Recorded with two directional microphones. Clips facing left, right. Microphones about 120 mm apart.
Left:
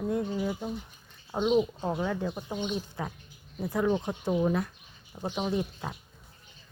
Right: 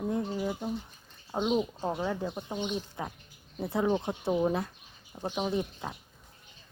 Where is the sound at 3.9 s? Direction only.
10° right (ahead or behind).